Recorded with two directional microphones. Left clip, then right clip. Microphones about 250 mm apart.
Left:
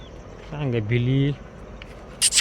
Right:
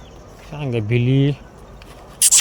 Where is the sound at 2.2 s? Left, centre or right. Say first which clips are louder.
Right 5 dB; right.